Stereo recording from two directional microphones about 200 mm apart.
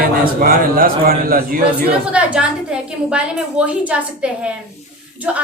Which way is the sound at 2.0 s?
5° right (ahead or behind).